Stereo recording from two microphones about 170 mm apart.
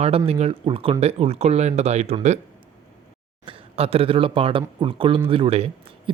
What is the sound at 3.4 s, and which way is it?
Speech, 35° right (ahead or behind).